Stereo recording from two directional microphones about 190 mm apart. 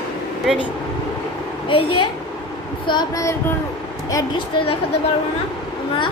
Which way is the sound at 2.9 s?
20° left (ahead or behind).